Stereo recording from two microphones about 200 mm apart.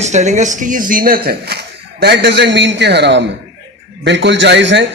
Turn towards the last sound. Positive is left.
turn(degrees=-60)  # may be behind; listen again after turning